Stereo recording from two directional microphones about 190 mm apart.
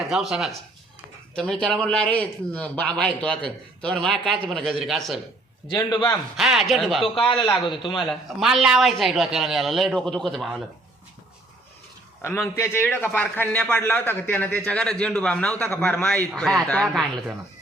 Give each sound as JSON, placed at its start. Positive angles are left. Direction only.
{"t": 0.1, "sound": "a man's voice", "side_deg": -5}
{"t": 5.6, "sound": "a man's voice", "side_deg": 20}
{"t": 6.1, "sound": "a man's voice", "side_deg": 0}
{"t": 7.3, "sound": "a man's voice", "side_deg": 25}
{"t": 7.9, "sound": "a man's voice", "side_deg": 0}
{"t": 12.2, "sound": "a man's voice", "side_deg": 15}